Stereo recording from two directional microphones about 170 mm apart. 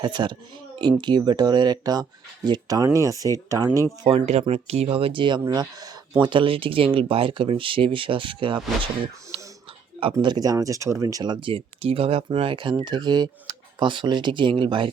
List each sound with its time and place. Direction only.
0.0 s speech: 25° right (ahead or behind)
4.0 s speech: 40° right (ahead or behind)